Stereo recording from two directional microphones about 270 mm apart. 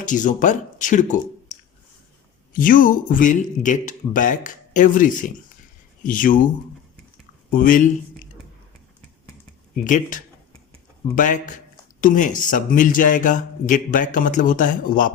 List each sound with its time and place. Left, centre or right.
0.0 s speech: left
2.5 s speech: left
7.5 s speech: left
9.8 s speech: left